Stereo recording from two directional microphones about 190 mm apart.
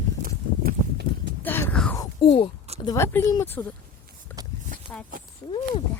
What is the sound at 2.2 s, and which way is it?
Speech, 30° left (ahead or behind).